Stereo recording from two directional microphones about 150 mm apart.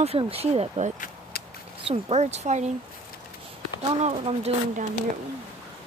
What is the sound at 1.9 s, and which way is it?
Speech, 45° right (ahead or behind).